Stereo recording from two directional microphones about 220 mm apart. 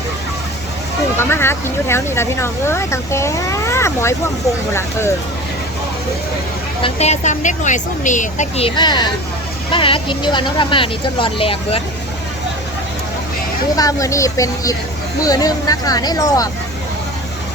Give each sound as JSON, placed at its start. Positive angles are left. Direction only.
{"t": 1.2, "sound": "speech", "side_deg": 10}
{"t": 6.8, "sound": "a woman's voice", "side_deg": 30}
{"t": 13.7, "sound": "speech", "side_deg": 15}